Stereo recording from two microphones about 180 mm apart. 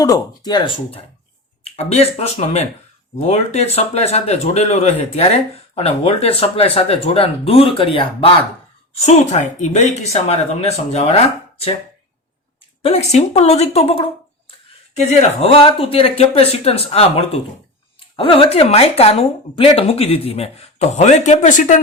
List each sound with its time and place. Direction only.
0.0 s speech: 20° left (ahead or behind)
12.8 s speech: 35° left (ahead or behind)